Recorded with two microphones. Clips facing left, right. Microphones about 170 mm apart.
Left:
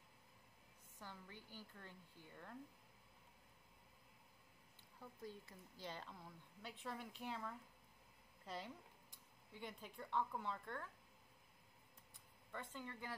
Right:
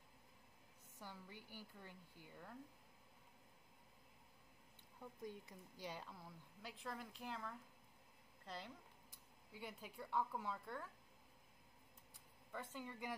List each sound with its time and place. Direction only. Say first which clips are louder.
0.9 s a woman's voice: right 1 dB; 10° right (ahead or behind)
5.0 s speech: right 2 dB; 15° right (ahead or behind); by 8.7 s 5° left (ahead or behind)
9.5 s a woman's voice: even; 10° right (ahead or behind)
12.5 s a woman's voice: right 1 dB; 10° right (ahead or behind)